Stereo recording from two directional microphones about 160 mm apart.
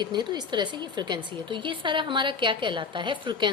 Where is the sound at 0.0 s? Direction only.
25° right (ahead or behind).